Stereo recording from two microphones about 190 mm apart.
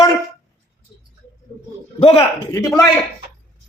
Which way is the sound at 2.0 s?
35° left (ahead or behind).